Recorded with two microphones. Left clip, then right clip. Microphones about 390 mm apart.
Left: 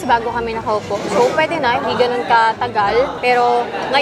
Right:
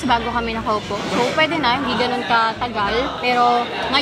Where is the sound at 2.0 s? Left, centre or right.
Left.